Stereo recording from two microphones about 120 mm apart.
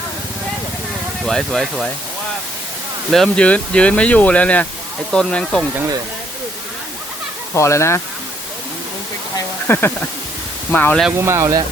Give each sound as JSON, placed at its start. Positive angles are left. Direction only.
{"t": 1.2, "sound": "speech", "side_deg": 0}
{"t": 3.1, "sound": "speech", "side_deg": 5}
{"t": 7.5, "sound": "speech", "side_deg": 25}
{"t": 9.6, "sound": "speech", "side_deg": 20}
{"t": 11.2, "sound": "speech", "side_deg": -20}